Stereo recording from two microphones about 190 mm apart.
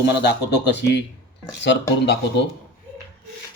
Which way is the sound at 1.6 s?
65° left (ahead or behind).